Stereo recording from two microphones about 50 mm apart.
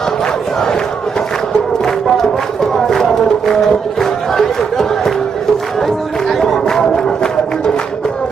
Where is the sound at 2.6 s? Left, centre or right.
Centre.